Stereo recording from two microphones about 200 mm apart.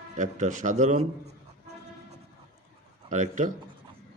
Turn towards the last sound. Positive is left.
turn(degrees=-40)  # may be behind; listen again after turning